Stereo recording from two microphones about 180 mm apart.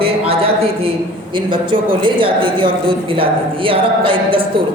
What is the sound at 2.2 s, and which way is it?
Speech, 30° right (ahead or behind).